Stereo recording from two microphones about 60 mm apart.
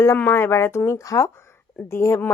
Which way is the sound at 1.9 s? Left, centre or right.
Left.